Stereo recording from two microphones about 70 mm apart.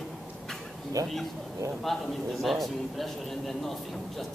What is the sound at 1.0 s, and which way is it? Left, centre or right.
Speech, right.